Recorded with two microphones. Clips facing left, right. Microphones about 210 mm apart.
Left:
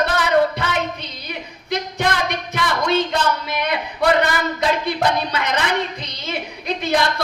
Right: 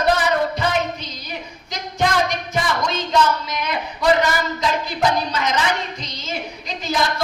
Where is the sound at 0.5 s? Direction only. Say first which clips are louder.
Right 2 dB; 60° left (ahead or behind).